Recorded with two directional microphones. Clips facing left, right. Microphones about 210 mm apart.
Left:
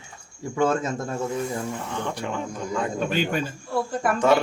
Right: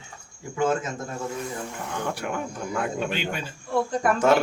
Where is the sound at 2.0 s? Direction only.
10° right (ahead or behind).